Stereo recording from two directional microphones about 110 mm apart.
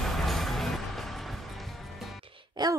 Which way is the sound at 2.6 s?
40° right (ahead or behind).